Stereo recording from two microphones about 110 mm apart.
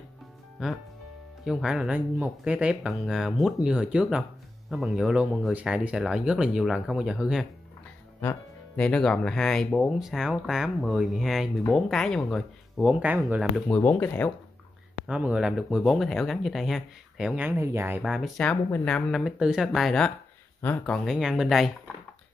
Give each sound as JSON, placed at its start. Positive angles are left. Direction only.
{"t": 0.6, "sound": "speech", "side_deg": -5}
{"t": 8.7, "sound": "speech", "side_deg": 10}
{"t": 13.7, "sound": "speech", "side_deg": 15}
{"t": 15.0, "sound": "speech", "side_deg": -10}
{"t": 17.4, "sound": "speech", "side_deg": -20}
{"t": 18.0, "sound": "speech", "side_deg": -5}
{"t": 18.4, "sound": "speech", "side_deg": 10}
{"t": 19.1, "sound": "speech", "side_deg": -5}
{"t": 21.0, "sound": "speech", "side_deg": -5}